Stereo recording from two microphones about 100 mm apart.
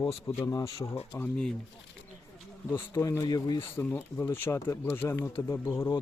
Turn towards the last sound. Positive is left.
turn(degrees=25)  # may be behind; listen again after turning